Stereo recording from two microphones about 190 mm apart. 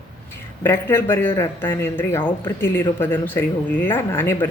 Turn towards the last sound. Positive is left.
turn(degrees=10)  # may be behind; listen again after turning